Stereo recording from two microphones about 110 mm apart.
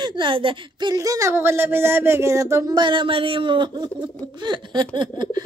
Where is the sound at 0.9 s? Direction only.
30° right (ahead or behind).